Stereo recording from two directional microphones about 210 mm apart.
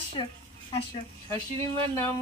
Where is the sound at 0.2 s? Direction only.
25° left (ahead or behind).